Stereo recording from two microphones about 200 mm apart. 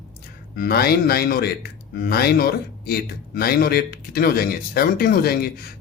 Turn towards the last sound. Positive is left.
turn(degrees=50)  # may be behind; listen again after turning